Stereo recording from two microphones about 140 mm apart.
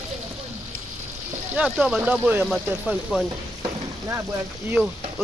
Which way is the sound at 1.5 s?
5° right (ahead or behind).